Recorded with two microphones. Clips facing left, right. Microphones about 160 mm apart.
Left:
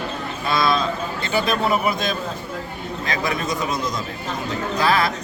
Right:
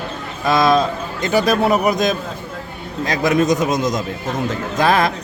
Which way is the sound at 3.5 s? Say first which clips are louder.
Right 6 dB; 45° right (ahead or behind).